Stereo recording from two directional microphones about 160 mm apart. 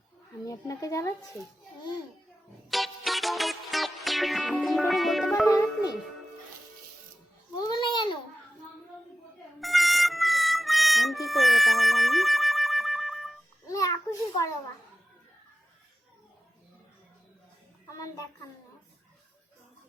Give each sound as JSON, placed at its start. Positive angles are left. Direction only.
{"t": 0.4, "sound": "speech", "side_deg": 20}
{"t": 2.6, "sound": "music", "side_deg": 0}
{"t": 5.5, "sound": "music", "side_deg": 25}
{"t": 7.5, "sound": "a sound", "side_deg": 25}
{"t": 9.6, "sound": "harmonica", "side_deg": 0}
{"t": 13.7, "sound": "a sound", "side_deg": 20}
{"t": 17.8, "sound": "child singing", "side_deg": 20}